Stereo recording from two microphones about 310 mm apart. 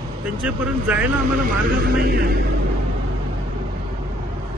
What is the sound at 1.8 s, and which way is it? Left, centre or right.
Vehicle, right.